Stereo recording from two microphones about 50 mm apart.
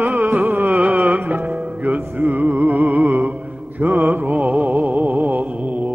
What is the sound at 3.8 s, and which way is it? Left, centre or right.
Mantra, right.